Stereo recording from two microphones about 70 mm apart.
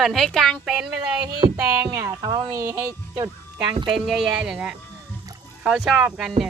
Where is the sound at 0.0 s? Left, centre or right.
Centre.